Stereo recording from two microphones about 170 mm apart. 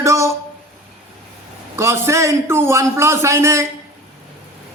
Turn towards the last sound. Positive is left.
turn(degrees=-15)  # may be behind; listen again after turning